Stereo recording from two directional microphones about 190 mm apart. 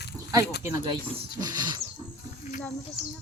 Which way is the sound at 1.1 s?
25° right (ahead or behind).